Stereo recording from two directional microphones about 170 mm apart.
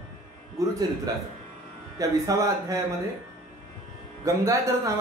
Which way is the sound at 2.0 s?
20° right (ahead or behind).